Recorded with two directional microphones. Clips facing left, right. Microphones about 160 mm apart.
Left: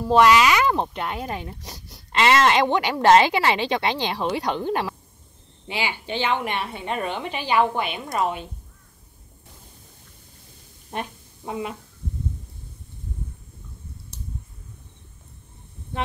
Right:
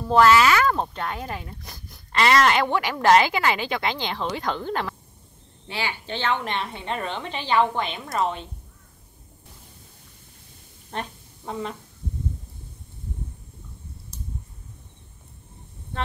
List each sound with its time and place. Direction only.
0.1 s a woman's voice: 15° left (ahead or behind)
4.1 s a woman's voice: 15° left (ahead or behind)
10.9 s a woman's voice: 10° left (ahead or behind)